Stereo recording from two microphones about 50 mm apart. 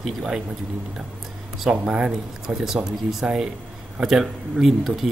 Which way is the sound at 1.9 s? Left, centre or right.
Centre.